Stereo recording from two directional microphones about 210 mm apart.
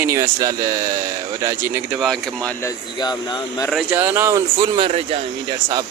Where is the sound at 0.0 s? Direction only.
15° right (ahead or behind).